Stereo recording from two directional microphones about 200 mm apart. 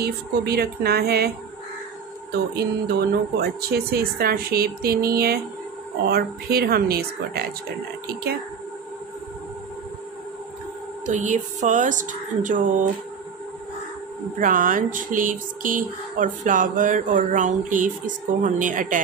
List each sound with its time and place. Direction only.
0.0 s speech: 50° right (ahead or behind)
2.5 s speech: 50° right (ahead or behind)
11.1 s speech: 35° right (ahead or behind)
14.4 s speech: 40° right (ahead or behind)